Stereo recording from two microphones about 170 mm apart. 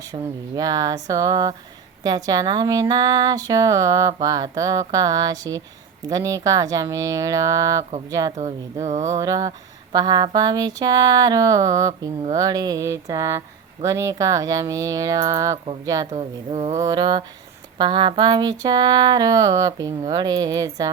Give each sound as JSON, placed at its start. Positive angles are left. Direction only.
{"t": 0.1, "sound": "speech", "side_deg": -20}
{"t": 8.4, "sound": "speech", "side_deg": -40}
{"t": 9.0, "sound": "speech", "side_deg": -20}
{"t": 16.1, "sound": "speech", "side_deg": -35}
{"t": 16.7, "sound": "speech", "side_deg": -25}